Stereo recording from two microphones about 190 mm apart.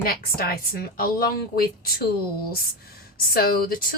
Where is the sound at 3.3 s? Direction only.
50° left (ahead or behind).